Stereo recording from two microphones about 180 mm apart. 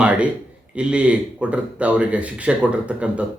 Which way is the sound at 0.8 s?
5° right (ahead or behind).